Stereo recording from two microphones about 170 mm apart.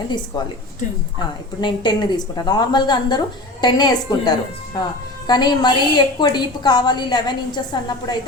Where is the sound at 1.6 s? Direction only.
25° left (ahead or behind).